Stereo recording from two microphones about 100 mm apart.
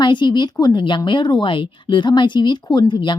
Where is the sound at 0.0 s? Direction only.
50° left (ahead or behind).